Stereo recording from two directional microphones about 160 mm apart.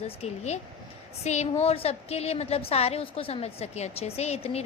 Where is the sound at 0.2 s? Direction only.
45° left (ahead or behind).